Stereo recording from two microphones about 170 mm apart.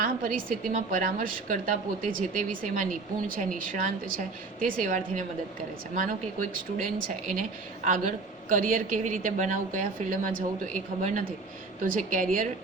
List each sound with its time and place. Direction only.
0.0 s a woman's voice: 50° right (ahead or behind)
7.9 s a woman's voice: 50° right (ahead or behind)